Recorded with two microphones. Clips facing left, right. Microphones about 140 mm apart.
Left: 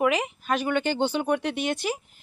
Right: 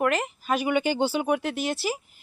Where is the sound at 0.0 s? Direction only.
Centre (ahead or behind).